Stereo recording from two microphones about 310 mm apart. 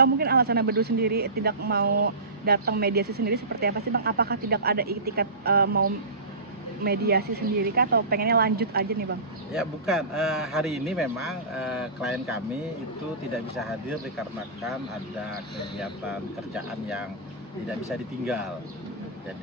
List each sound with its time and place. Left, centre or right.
0.0 s speech: right
9.5 s a man's voice: centre